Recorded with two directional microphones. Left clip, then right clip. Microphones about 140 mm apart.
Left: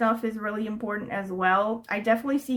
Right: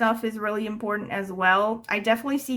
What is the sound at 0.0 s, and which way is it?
A woman's voice, 25° right (ahead or behind).